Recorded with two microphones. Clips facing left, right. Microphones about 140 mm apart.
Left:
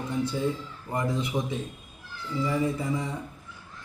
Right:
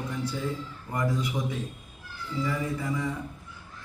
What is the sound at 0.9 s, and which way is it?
Mantra, 25° left (ahead or behind).